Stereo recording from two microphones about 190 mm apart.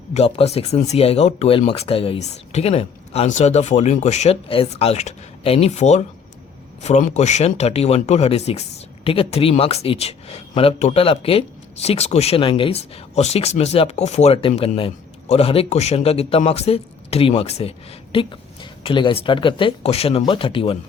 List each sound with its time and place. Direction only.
0.1 s speech: 35° left (ahead or behind)